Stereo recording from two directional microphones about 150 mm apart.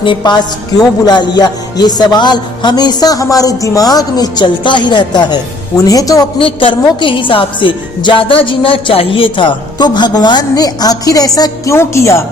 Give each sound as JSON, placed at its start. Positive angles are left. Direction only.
{"t": 0.0, "sound": "a woman's voice", "side_deg": 30}
{"t": 1.0, "sound": "music", "side_deg": 30}
{"t": 6.4, "sound": "a woman's voice", "side_deg": 35}